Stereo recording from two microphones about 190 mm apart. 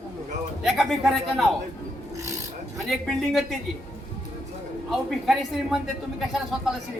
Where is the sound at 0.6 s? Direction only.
Centre (ahead or behind).